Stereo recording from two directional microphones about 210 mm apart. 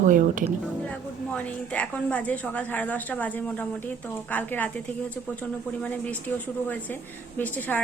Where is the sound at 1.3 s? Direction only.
5° left (ahead or behind).